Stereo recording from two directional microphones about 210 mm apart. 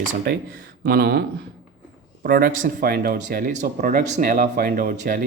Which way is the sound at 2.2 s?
45° right (ahead or behind).